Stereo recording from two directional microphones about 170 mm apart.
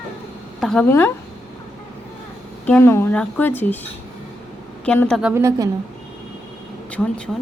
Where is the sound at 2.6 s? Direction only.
10° left (ahead or behind).